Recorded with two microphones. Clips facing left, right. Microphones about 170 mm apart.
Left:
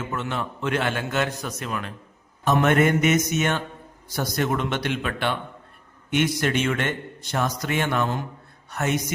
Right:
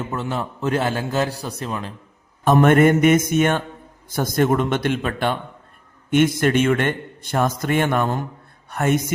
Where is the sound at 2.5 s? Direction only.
50° right (ahead or behind).